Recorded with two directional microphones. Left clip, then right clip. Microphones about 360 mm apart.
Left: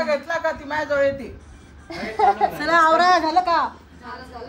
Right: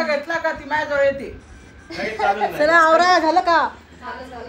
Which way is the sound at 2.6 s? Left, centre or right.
Centre.